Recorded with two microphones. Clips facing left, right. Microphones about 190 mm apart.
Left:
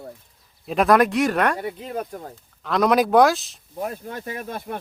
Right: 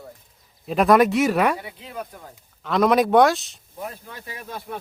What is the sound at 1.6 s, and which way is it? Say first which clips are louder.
Speech: left 6 dB; 45° left (ahead or behind).